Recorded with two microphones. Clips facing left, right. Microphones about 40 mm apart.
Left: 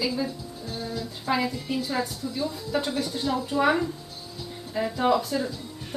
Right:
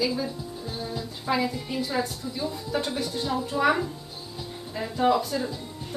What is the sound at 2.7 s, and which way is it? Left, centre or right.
Speech, centre.